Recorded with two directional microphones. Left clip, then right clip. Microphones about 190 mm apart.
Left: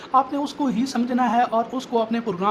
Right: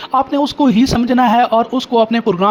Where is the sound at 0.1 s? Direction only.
35° right (ahead or behind).